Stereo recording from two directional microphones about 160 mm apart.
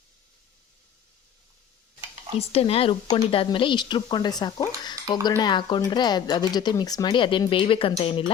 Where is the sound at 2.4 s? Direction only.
40° left (ahead or behind).